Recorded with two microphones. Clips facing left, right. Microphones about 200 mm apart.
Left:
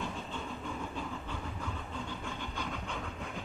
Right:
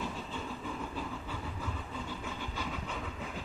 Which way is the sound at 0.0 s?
5° right (ahead or behind).